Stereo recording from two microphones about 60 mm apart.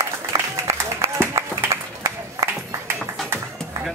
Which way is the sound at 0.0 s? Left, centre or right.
Right.